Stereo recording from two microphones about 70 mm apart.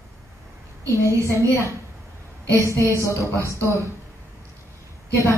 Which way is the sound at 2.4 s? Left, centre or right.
Right.